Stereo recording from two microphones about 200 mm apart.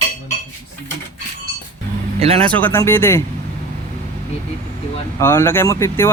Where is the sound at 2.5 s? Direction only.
10° left (ahead or behind).